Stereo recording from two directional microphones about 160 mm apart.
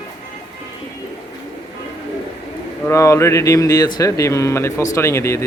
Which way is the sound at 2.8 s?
20° left (ahead or behind).